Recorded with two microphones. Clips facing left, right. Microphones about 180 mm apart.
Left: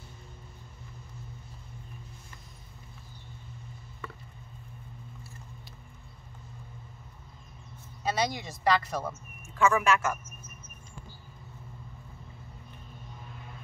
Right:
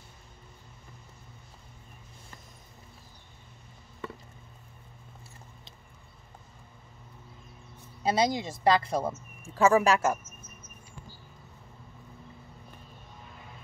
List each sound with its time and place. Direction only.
8.0 s speech: 30° right (ahead or behind)